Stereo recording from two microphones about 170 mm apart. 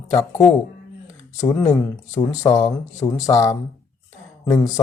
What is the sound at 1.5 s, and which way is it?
Speech, 20° left (ahead or behind).